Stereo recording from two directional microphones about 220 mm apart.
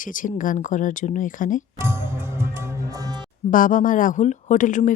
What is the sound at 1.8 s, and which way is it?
Music, 10° right (ahead or behind).